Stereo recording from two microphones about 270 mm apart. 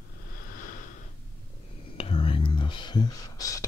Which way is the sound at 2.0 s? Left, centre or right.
Left.